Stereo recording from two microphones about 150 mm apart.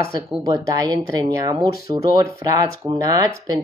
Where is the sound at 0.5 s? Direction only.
25° right (ahead or behind).